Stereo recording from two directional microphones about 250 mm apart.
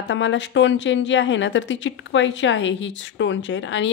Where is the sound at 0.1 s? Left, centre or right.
Left.